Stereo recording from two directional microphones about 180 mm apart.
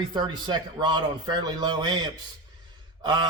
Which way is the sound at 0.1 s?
25° right (ahead or behind).